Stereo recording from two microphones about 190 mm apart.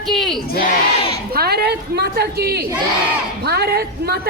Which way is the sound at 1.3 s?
55° right (ahead or behind).